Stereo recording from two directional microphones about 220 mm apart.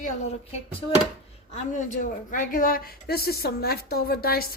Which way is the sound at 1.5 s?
35° left (ahead or behind).